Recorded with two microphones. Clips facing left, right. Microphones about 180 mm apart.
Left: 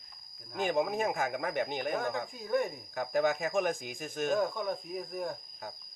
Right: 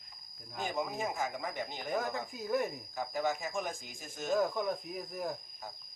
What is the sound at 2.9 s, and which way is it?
Speech, 65° left (ahead or behind).